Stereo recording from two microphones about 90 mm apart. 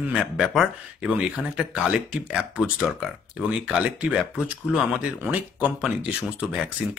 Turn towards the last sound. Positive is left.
turn(degrees=-15)  # may be behind; listen again after turning